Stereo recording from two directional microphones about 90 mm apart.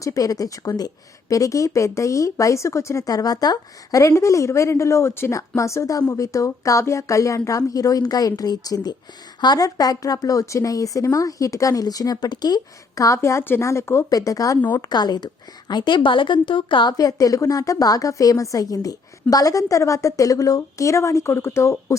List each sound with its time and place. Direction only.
0.0 s speech: 40° left (ahead or behind)
14.1 s speech: 40° left (ahead or behind)
14.8 s a woman's voice: 50° left (ahead or behind)
17.0 s speech: 40° left (ahead or behind)